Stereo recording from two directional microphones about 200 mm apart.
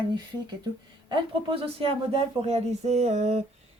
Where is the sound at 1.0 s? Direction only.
25° right (ahead or behind).